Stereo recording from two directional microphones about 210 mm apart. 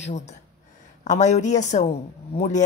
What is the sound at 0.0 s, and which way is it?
Speech, 35° left (ahead or behind).